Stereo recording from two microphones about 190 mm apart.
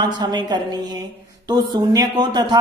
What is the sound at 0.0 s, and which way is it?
Speech, 25° right (ahead or behind).